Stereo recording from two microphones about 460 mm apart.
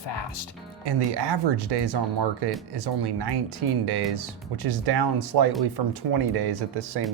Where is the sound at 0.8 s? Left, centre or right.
Right.